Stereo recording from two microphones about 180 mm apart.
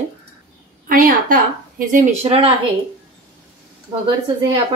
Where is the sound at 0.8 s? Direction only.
50° right (ahead or behind).